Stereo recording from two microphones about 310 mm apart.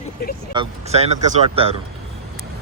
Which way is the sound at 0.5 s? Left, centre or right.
Centre.